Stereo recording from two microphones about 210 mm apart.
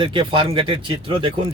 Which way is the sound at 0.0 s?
25° right (ahead or behind).